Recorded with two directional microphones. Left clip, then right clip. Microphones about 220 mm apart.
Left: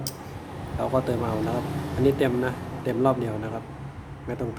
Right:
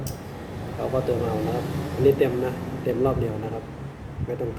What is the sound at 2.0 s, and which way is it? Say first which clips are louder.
Speech: right 4 dB; 40° left (ahead or behind).